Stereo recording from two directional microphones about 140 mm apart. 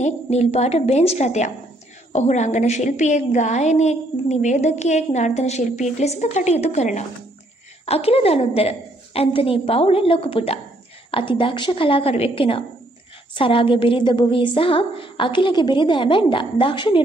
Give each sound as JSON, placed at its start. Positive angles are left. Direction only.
{"t": 0.0, "sound": "a woman's voice", "side_deg": 50}